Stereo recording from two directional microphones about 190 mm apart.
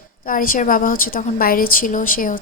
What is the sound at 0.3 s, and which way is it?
A woman's voice, 45° left (ahead or behind).